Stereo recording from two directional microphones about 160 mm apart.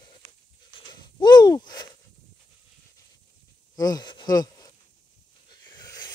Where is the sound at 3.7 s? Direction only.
25° left (ahead or behind).